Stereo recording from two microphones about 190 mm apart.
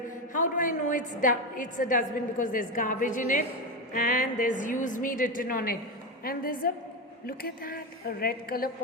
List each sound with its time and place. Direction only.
0.3 s a woman's voice: 45° left (ahead or behind)